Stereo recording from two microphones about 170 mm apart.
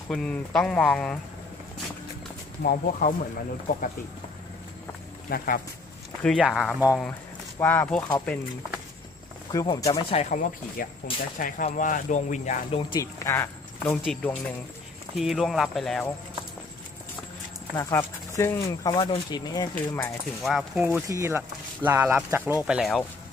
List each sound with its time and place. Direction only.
0.1 s speech: 5° left (ahead or behind)
2.6 s speech: 55° left (ahead or behind)
5.3 s speech: 60° left (ahead or behind)
6.2 s speech: centre (ahead or behind)
7.6 s speech: 10° left (ahead or behind)
9.5 s speech: 20° left (ahead or behind)
10.2 s speech: 45° left (ahead or behind)
12.9 s speech: 20° left (ahead or behind); by 16.1 s centre (ahead or behind)
17.7 s speech: 15° left (ahead or behind)
18.9 s speech: 25° left (ahead or behind)
19.7 s speech: 10° left (ahead or behind)
20.8 s speech: 15° right (ahead or behind)
22.6 s speech: 5° right (ahead or behind)